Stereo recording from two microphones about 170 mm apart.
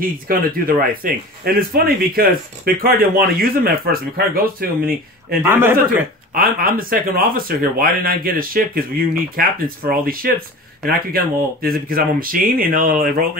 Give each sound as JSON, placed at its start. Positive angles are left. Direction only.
{"t": 0.0, "sound": "a man's voice", "side_deg": -55}
{"t": 5.4, "sound": "a man's voice", "side_deg": -10}
{"t": 6.3, "sound": "a man's voice", "side_deg": -55}